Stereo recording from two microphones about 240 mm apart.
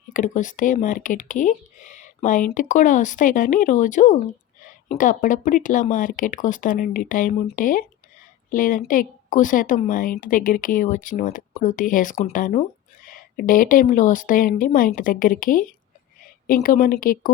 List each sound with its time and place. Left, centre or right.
0.1 s speech: left